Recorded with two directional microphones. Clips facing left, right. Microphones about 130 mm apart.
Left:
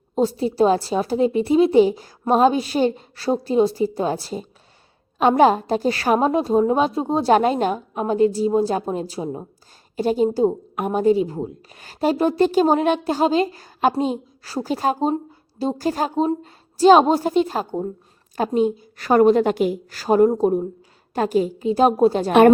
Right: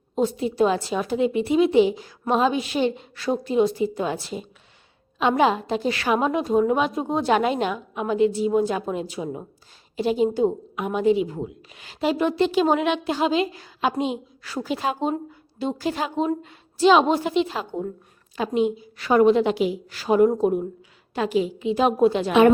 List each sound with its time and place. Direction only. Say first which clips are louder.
0.2 s a woman's voice: left 3 dB; 35° left (ahead or behind)